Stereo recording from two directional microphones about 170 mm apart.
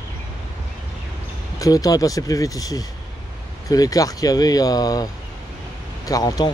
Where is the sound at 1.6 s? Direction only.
20° left (ahead or behind).